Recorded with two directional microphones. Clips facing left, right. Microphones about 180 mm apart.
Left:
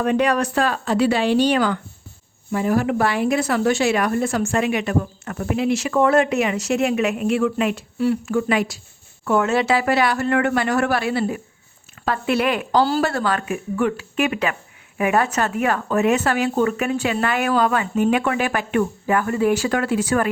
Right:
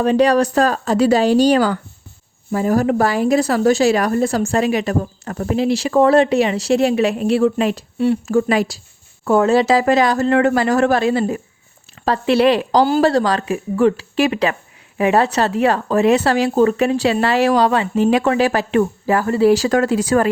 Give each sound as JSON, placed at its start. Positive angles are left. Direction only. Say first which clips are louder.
{"t": 0.0, "sound": "a woman's voice", "louder": "right 5 dB", "side_deg": -30}
{"t": 8.3, "sound": "a woman's voice", "louder": "right 4 dB", "side_deg": -35}